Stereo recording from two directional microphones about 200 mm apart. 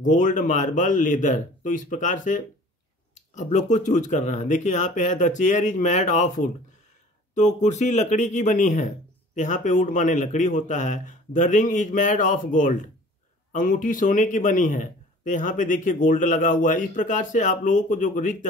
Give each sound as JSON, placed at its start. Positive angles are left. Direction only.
{"t": 0.0, "sound": "speech", "side_deg": 40}